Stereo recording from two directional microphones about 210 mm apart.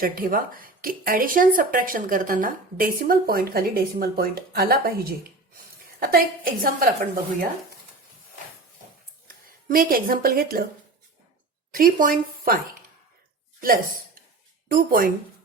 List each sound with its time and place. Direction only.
0.0 s speech: 45° right (ahead or behind)
9.2 s speech: 45° right (ahead or behind)
11.7 s speech: 40° right (ahead or behind)
14.7 s speech: 40° right (ahead or behind)